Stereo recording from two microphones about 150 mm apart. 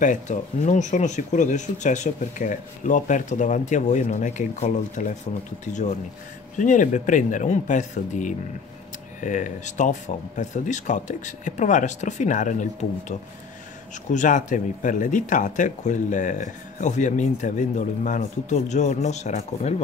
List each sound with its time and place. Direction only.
0.0 s speech: 55° left (ahead or behind)
14.1 s speech: 55° left (ahead or behind)